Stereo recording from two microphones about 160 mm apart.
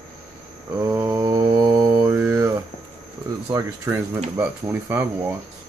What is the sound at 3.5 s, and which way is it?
Speech, 20° right (ahead or behind).